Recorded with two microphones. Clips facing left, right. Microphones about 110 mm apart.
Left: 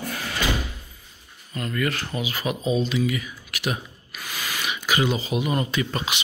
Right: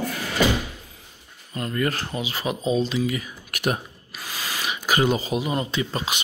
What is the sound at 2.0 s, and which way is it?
Speech, 25° right (ahead or behind).